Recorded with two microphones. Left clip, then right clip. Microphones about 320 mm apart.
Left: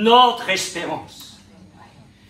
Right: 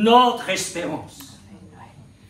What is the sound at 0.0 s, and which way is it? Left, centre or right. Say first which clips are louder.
Speech: left 2 dB; centre.